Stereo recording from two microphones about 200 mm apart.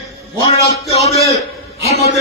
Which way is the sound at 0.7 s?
30° left (ahead or behind).